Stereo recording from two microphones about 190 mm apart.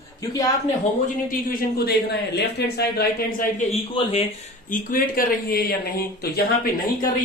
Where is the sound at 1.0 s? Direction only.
50° left (ahead or behind).